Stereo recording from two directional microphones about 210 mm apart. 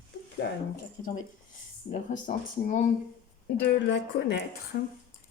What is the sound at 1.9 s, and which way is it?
Speech, 40° left (ahead or behind).